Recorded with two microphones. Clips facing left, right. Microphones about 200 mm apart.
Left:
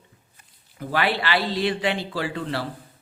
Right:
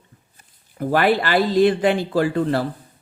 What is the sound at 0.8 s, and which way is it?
Speech, 50° right (ahead or behind).